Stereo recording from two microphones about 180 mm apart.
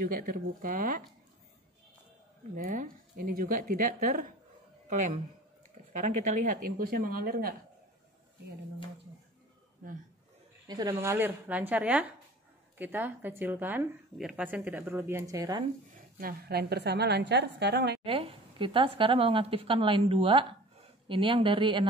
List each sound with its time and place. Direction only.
0.0 s speech: 55° right (ahead or behind)
2.5 s speech: 50° right (ahead or behind)
10.7 s speech: 20° right (ahead or behind)
16.2 s a woman's voice: 60° right (ahead or behind)
18.0 s a woman's voice: 30° right (ahead or behind)